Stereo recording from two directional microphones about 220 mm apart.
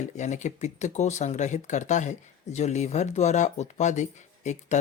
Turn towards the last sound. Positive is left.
turn(degrees=30)  # may be behind; listen again after turning